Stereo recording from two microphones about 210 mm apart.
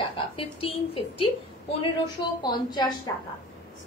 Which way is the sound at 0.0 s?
25° left (ahead or behind).